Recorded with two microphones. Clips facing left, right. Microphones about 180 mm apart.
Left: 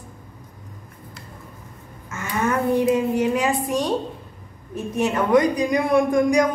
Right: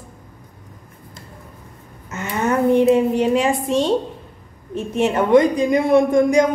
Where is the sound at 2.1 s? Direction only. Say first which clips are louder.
Right 3 dB; 25° right (ahead or behind).